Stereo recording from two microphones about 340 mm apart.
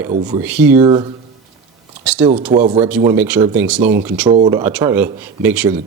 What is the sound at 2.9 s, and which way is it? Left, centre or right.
Speech, centre.